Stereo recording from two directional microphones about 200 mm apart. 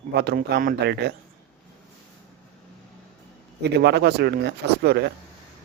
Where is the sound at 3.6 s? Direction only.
55° right (ahead or behind).